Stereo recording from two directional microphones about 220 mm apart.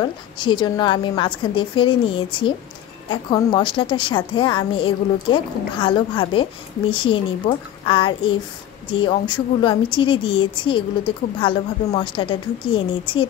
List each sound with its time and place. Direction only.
0.0 s a woman's voice: 20° left (ahead or behind)